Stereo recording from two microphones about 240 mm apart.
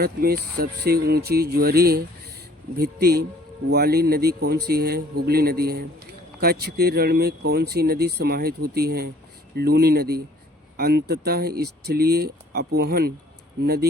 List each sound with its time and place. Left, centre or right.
0.0 s speech: right